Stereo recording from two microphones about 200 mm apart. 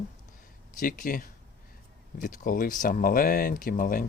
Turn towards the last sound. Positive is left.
turn(degrees=45)  # may be behind; listen again after turning